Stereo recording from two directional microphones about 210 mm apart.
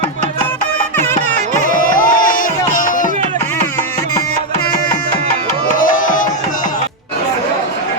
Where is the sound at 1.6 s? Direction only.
40° left (ahead or behind).